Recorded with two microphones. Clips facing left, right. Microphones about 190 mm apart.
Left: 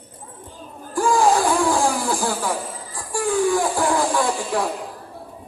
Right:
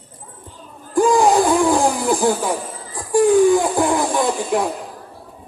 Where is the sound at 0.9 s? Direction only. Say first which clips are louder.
Right 4 dB; 20° right (ahead or behind).